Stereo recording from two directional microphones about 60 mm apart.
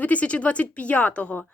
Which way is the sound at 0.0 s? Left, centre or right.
Left.